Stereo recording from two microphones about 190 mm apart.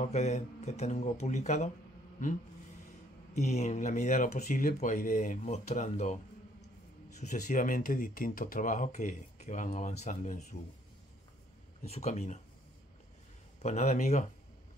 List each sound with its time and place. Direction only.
0.0 s speech: 35° left (ahead or behind)
3.3 s speech: 35° left (ahead or behind)
7.2 s speech: 40° left (ahead or behind)
11.8 s speech: 35° left (ahead or behind)
13.6 s speech: 35° left (ahead or behind)